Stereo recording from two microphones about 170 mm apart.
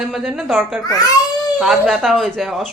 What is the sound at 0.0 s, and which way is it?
Speech, centre (ahead or behind).